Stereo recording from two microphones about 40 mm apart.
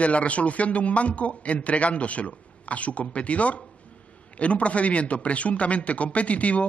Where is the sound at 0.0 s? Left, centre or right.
Left.